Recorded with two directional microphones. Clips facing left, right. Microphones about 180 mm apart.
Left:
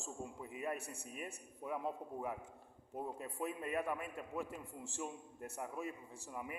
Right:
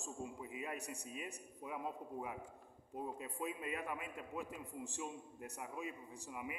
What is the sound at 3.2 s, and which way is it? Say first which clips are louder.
A man's voice: left 2 dB; 15° right (ahead or behind).